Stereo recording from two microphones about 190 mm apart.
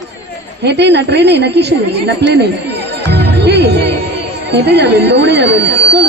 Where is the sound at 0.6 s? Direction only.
65° right (ahead or behind).